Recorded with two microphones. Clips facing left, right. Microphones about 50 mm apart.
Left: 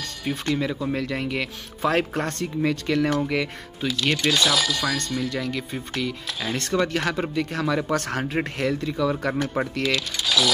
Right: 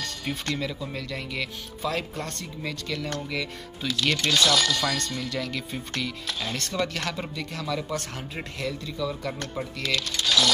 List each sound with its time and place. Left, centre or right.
0.2 s speech: centre
0.6 s speech: left
1.0 s speech: left
3.8 s speech: centre
7.1 s speech: left
7.9 s speech: left
8.4 s speech: left
9.8 s speech: centre